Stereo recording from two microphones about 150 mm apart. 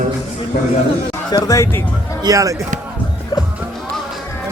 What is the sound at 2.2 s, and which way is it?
Speech, 20° right (ahead or behind).